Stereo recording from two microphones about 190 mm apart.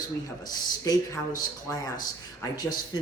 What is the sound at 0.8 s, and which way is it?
Speech, 20° left (ahead or behind).